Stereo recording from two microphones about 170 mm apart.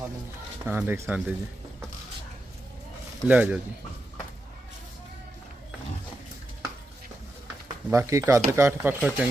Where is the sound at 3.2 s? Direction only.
10° right (ahead or behind).